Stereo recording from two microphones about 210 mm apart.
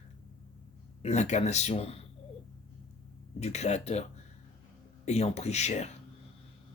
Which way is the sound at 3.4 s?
30° left (ahead or behind).